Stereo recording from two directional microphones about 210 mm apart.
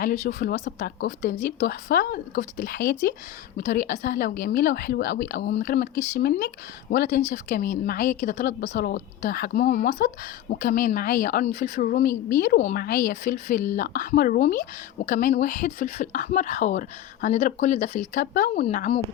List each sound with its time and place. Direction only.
0.0 s a woman's voice: 45° left (ahead or behind)